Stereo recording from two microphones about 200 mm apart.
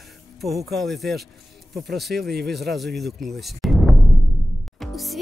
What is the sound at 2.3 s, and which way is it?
Speech, 55° right (ahead or behind).